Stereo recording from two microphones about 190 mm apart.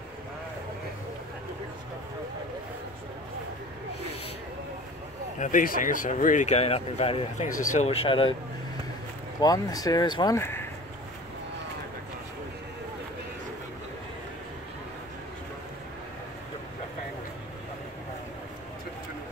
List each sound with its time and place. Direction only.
5.4 s speech: 45° left (ahead or behind); by 8.4 s 25° left (ahead or behind)
9.4 s speech: 20° left (ahead or behind)